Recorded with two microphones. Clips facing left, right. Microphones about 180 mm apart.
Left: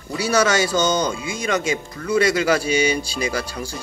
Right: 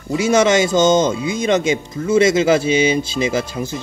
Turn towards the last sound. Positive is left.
turn(degrees=-20)  # may be behind; listen again after turning